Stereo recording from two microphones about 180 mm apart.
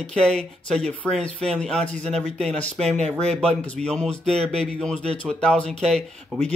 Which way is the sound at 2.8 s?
40° right (ahead or behind).